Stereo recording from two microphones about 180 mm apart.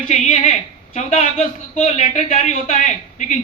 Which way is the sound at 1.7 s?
40° left (ahead or behind).